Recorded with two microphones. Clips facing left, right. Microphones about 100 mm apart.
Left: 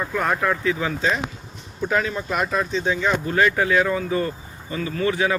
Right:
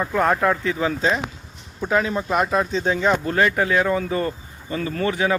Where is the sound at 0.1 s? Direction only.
30° right (ahead or behind).